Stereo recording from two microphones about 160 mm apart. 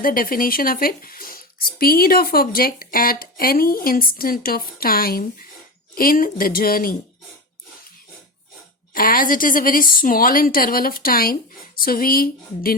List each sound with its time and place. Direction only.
0.0 s speech: 65° left (ahead or behind)
8.9 s speech: 60° left (ahead or behind)